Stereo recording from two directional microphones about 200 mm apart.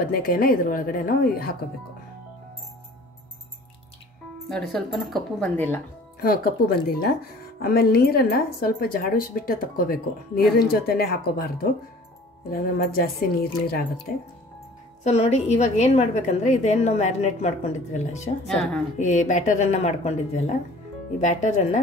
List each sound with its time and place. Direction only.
0.1 s speech: 45° left (ahead or behind)
4.5 s speech: 5° left (ahead or behind)
6.2 s speech: 50° left (ahead or behind)
15.0 s a woman's voice: 30° left (ahead or behind)